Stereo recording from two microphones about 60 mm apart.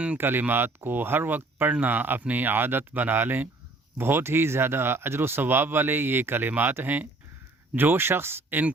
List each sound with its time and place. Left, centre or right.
0.2 s speech: right